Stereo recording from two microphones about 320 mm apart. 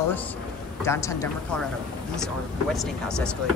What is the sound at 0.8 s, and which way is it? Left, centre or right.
Speech, centre.